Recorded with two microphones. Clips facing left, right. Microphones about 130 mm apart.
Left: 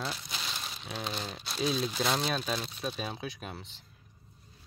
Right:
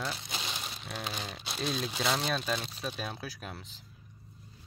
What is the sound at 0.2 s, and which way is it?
Crumpling, 25° right (ahead or behind).